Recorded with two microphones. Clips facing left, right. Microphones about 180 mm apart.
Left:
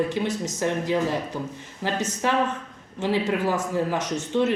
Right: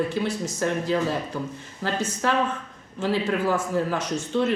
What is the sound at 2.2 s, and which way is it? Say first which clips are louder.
Speech: left 1 dB; 15° left (ahead or behind).